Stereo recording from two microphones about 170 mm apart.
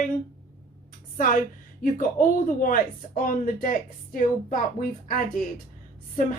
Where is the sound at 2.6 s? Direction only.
55° left (ahead or behind).